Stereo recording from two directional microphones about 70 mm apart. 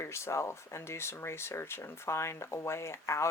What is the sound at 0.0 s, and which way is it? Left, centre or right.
Speech, left.